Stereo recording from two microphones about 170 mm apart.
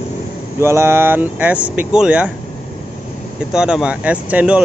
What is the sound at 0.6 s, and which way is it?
Speech, 15° right (ahead or behind).